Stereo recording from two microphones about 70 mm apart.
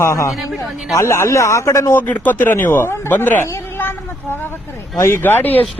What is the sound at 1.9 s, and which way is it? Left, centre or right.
Speech, left.